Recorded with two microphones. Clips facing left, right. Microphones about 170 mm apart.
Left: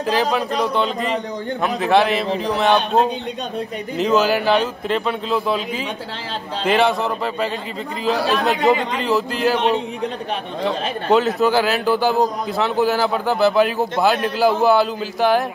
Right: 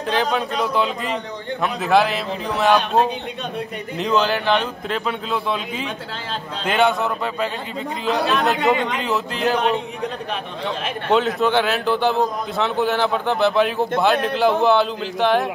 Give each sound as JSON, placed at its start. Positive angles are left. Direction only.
{"t": 0.1, "sound": "a man's voice", "side_deg": 5}
{"t": 4.0, "sound": "a man's voice", "side_deg": 5}
{"t": 8.0, "sound": "a man's voice", "side_deg": 0}
{"t": 8.6, "sound": "speech", "side_deg": 35}
{"t": 9.0, "sound": "a man's voice", "side_deg": 0}
{"t": 11.1, "sound": "a man's voice", "side_deg": 0}